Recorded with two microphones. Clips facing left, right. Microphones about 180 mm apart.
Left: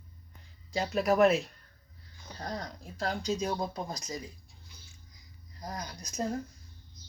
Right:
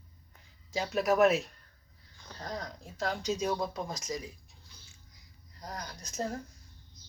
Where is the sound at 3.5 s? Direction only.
30° left (ahead or behind).